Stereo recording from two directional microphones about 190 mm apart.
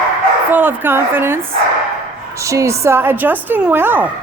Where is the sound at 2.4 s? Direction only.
15° right (ahead or behind).